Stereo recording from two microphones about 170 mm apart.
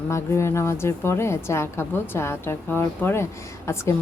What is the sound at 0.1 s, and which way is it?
A woman's voice, 15° left (ahead or behind).